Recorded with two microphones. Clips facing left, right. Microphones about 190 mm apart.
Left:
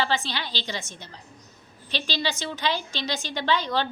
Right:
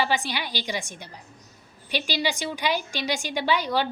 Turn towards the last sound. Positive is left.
turn(degrees=-10)  # may be behind; listen again after turning